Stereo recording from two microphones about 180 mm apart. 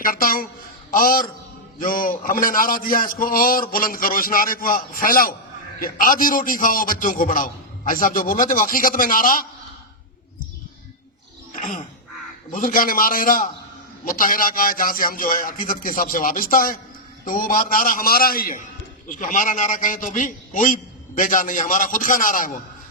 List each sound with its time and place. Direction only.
0.0 s a man's voice: 50° left (ahead or behind)
11.5 s a sound: 45° left (ahead or behind)
12.5 s a man's voice: 50° left (ahead or behind)